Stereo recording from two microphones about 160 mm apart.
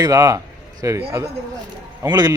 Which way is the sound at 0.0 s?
20° right (ahead or behind).